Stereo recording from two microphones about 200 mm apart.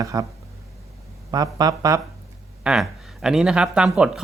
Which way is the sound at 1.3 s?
20° right (ahead or behind).